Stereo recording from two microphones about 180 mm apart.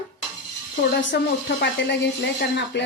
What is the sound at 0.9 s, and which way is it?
Speech, 70° left (ahead or behind).